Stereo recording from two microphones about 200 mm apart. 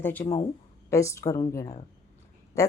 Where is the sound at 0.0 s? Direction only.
10° left (ahead or behind).